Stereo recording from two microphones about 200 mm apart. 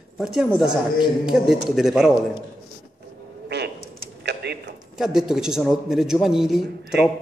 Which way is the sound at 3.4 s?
55° right (ahead or behind).